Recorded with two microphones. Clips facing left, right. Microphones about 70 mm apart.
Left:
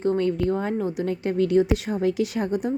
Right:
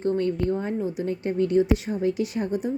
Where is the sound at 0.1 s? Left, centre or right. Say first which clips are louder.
Left 1 dB; left.